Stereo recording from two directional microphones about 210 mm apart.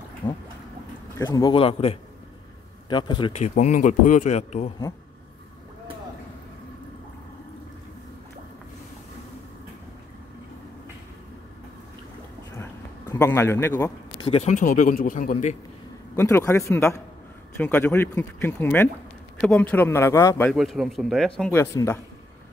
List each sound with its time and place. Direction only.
0.2 s a man's voice: 20° left (ahead or behind)
3.4 s speech: 35° left (ahead or behind)
12.5 s a sound: 15° left (ahead or behind)
14.2 s speech: 30° left (ahead or behind)
16.2 s speech: 10° left (ahead or behind)
20.5 s speech: centre (ahead or behind)
21.4 s speech: 10° left (ahead or behind)